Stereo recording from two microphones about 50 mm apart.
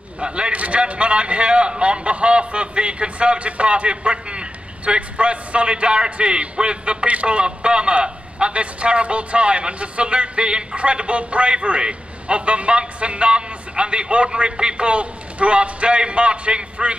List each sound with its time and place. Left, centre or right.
0.2 s a man's voice: right